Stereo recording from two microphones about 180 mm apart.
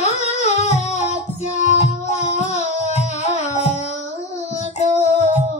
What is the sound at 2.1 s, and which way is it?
Music, 40° left (ahead or behind).